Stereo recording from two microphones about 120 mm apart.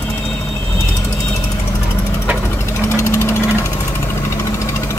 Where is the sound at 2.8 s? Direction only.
25° left (ahead or behind).